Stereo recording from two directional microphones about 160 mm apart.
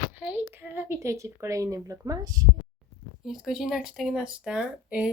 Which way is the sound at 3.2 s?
5° right (ahead or behind).